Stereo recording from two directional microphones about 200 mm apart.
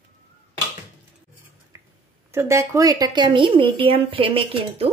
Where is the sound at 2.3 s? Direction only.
15° right (ahead or behind).